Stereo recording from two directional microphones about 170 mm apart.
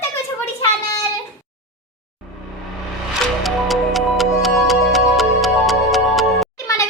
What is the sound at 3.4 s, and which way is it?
Music, centre (ahead or behind).